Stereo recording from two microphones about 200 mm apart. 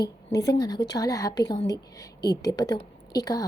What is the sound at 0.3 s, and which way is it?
A woman's voice, 15° left (ahead or behind).